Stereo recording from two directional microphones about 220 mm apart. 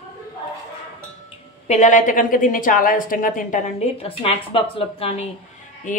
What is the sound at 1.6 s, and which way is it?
A woman's voice, 35° left (ahead or behind).